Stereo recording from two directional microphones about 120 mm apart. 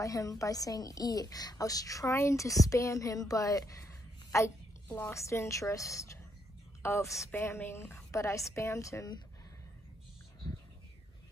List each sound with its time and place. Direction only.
0.0 s a woman's voice: 30° left (ahead or behind)
4.8 s a woman's voice: 15° left (ahead or behind)